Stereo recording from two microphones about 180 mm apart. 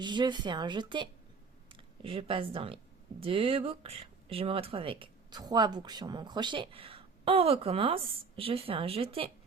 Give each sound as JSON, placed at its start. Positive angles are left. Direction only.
{"t": 0.0, "sound": "speech", "side_deg": -25}